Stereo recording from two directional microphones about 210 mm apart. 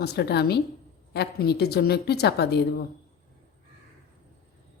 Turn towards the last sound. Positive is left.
turn(degrees=50)  # may be behind; listen again after turning